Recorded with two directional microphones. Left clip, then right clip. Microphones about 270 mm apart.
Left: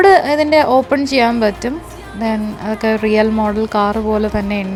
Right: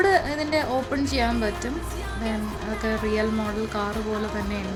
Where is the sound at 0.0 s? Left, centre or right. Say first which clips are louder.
Left 12 dB; left.